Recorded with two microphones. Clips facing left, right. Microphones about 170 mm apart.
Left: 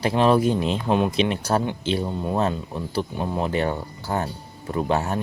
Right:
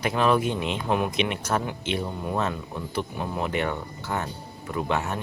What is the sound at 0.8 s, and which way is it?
Speech, 25° left (ahead or behind).